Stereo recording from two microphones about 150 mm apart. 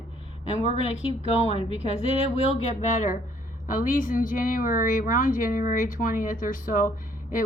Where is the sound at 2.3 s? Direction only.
50° left (ahead or behind); by 6.9 s 65° left (ahead or behind).